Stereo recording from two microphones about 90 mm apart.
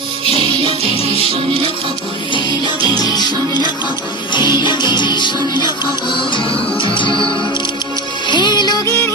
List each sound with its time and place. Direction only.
0.3 s music: 90° right
2.8 s music: 45° left (ahead or behind)
6.3 s music: 65° left (ahead or behind); by 8.8 s 50° left (ahead or behind)